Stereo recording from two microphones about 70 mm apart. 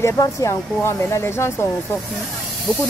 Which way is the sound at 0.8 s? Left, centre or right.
Left.